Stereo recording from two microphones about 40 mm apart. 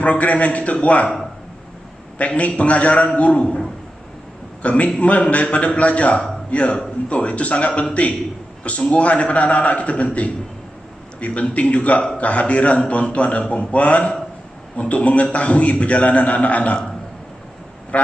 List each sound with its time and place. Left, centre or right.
0.0 s a man's voice: left
2.1 s a man's voice: left
4.6 s a man's voice: left
17.9 s vehicle: left